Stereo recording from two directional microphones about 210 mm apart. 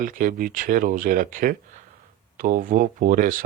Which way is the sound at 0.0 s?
40° right (ahead or behind).